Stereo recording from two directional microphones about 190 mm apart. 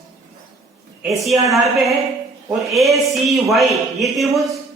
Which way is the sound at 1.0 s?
Centre (ahead or behind).